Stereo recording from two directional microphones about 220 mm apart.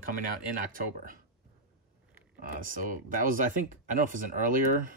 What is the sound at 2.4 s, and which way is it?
Speech, 40° right (ahead or behind).